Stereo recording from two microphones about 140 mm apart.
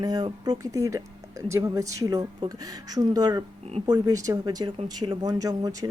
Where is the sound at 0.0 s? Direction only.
30° right (ahead or behind).